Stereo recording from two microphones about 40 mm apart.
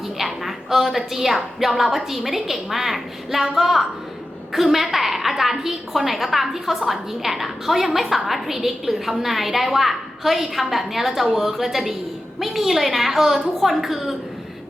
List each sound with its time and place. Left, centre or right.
0.2 s a woman's voice: centre